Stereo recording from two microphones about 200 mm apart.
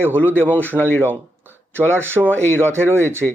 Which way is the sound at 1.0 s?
10° right (ahead or behind).